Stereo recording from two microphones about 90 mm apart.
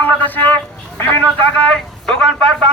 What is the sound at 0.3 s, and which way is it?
Speech, 20° left (ahead or behind).